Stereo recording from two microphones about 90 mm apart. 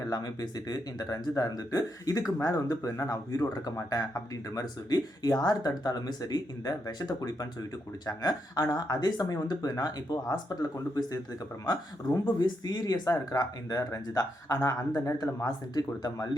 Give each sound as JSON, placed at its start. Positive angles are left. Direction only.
{"t": 0.0, "sound": "speech", "side_deg": 45}